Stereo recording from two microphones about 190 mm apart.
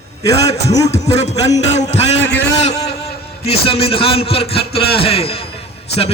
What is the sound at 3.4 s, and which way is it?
A man's voice, 30° left (ahead or behind).